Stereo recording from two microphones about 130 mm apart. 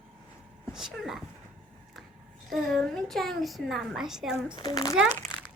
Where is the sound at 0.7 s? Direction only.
Centre (ahead or behind).